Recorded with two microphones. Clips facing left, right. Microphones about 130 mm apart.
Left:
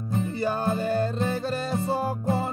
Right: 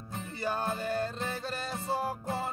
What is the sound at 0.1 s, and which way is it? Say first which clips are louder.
Music: left 8 dB; 30° left (ahead or behind).